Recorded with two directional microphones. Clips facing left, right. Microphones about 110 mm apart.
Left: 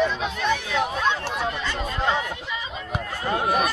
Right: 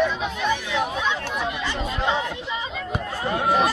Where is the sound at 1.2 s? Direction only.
35° left (ahead or behind).